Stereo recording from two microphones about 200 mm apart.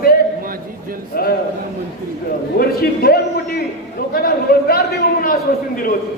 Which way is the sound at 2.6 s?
50° left (ahead or behind).